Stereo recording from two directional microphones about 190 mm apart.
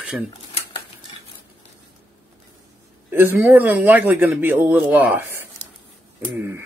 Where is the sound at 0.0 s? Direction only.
5° right (ahead or behind).